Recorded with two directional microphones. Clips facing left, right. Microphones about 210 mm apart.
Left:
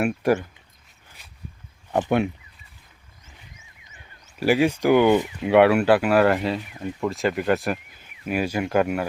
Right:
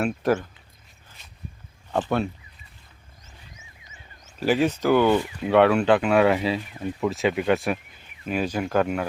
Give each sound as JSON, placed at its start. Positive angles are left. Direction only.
{"t": 0.0, "sound": "speech", "side_deg": 10}
{"t": 1.9, "sound": "speech", "side_deg": 15}
{"t": 4.4, "sound": "speech", "side_deg": 10}